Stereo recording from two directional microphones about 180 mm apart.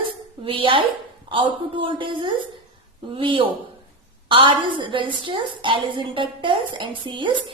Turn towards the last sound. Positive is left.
turn(degrees=-25)  # may be behind; listen again after turning